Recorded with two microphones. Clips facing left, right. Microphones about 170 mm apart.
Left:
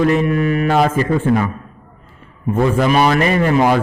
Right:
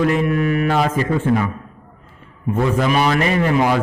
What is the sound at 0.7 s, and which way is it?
Speech, 45° left (ahead or behind).